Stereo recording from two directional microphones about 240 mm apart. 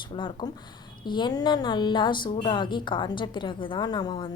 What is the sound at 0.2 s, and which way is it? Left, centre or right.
A woman's voice, centre.